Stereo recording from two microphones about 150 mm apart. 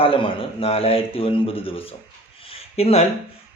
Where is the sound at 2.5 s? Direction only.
40° left (ahead or behind).